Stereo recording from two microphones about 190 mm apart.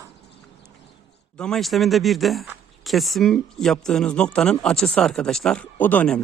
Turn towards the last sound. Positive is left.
turn(degrees=5)  # may be behind; listen again after turning